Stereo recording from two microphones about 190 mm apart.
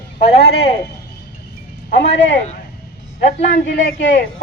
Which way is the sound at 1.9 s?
70° left (ahead or behind).